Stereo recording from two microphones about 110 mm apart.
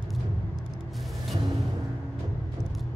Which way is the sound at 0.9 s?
Centre (ahead or behind).